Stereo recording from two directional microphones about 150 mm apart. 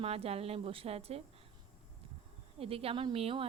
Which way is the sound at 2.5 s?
40° right (ahead or behind).